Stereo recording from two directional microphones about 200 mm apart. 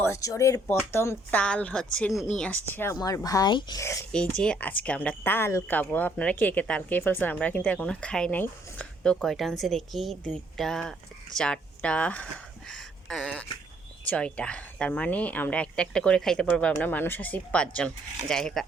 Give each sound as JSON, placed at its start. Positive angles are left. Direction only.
{"t": 0.0, "sound": "speech", "side_deg": 15}
{"t": 4.4, "sound": "speech", "side_deg": 5}